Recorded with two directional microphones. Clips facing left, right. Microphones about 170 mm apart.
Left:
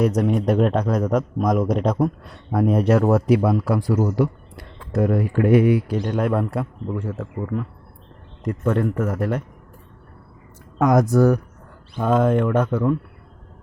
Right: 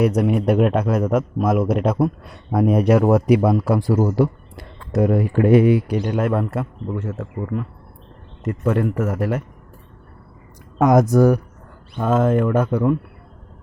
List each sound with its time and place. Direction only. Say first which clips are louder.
0.0 s a man's voice: right 2 dB; 10° right (ahead or behind); by 4.6 s 30° right (ahead or behind)
4.9 s speech: right 2 dB; 20° right (ahead or behind)
6.0 s speech: right 1 dB; 5° right (ahead or behind)
10.8 s speech: right 2 dB; 20° right (ahead or behind)
11.9 s speech: right 1 dB; centre (ahead or behind)